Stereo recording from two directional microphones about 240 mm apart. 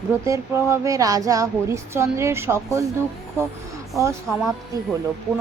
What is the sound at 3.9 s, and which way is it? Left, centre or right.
Speech, centre.